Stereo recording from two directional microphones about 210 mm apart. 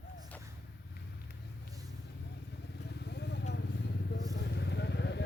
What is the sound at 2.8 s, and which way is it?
Vehicle, 55° left (ahead or behind).